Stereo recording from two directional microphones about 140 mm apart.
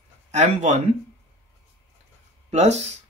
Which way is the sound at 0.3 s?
55° right (ahead or behind).